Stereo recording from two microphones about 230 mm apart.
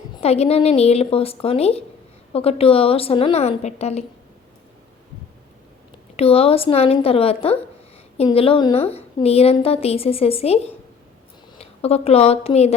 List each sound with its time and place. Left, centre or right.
0.2 s a woman's voice: left
6.1 s a woman's voice: left